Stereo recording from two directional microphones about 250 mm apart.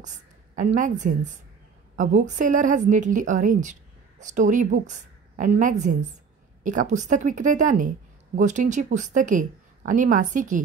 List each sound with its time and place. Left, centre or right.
0.6 s a woman's voice: right